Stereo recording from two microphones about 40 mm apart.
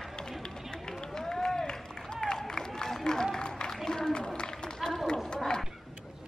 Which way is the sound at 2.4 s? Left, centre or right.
Centre.